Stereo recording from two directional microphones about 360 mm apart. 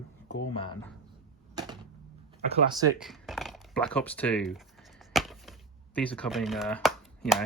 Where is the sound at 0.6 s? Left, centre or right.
Centre.